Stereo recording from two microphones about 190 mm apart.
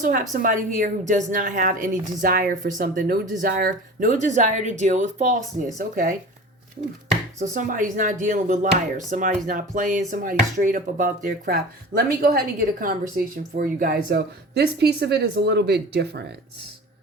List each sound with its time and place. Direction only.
0.0 s speech: 45° right (ahead or behind)
7.5 s speech: 45° right (ahead or behind); by 16.2 s 60° right (ahead or behind)